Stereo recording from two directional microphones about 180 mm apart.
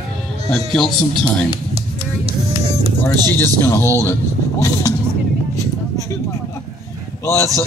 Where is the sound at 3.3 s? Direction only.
15° left (ahead or behind).